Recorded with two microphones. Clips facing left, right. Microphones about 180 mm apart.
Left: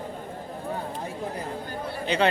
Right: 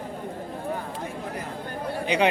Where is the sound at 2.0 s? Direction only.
15° right (ahead or behind).